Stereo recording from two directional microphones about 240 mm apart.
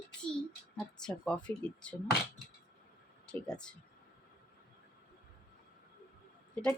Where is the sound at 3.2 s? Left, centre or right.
Centre.